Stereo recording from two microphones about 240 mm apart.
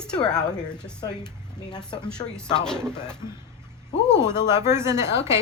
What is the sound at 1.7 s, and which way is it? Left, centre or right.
Speech, centre.